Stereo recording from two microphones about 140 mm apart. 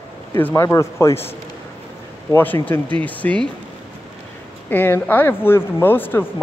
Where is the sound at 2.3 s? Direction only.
15° left (ahead or behind).